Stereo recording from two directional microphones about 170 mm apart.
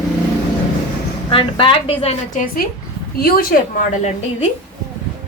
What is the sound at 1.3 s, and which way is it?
Speech, 30° left (ahead or behind).